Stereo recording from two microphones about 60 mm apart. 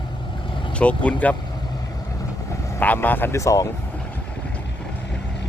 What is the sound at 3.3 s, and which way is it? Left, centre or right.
Speech, left.